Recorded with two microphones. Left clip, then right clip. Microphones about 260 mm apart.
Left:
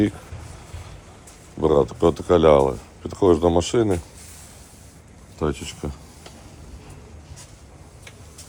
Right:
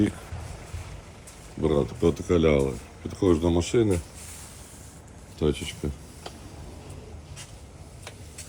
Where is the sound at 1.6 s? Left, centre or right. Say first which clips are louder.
Left 6 dB; left.